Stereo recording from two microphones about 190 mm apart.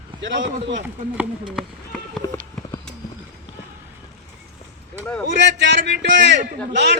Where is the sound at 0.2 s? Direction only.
70° right (ahead or behind).